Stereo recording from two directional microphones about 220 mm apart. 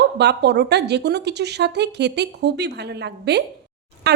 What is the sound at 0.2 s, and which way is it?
A woman's voice, 50° right (ahead or behind).